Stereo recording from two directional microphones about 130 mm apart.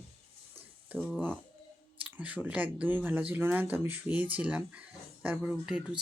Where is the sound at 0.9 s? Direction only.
10° right (ahead or behind).